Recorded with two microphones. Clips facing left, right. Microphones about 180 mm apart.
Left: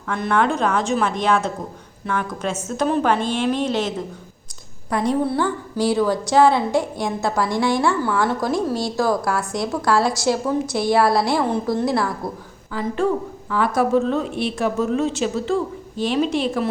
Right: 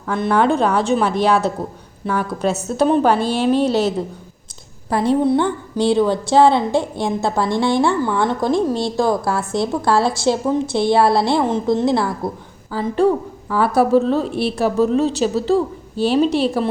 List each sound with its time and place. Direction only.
0.1 s a woman's voice: 30° right (ahead or behind)